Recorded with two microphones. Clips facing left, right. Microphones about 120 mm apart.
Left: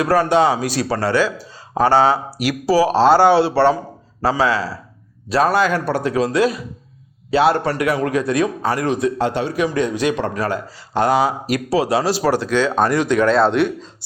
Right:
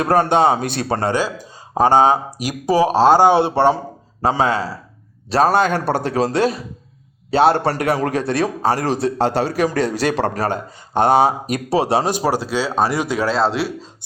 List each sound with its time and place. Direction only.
0.6 s speech: 55° right (ahead or behind)
0.9 s speech: 30° right (ahead or behind)
1.1 s a man's voice: 15° right (ahead or behind)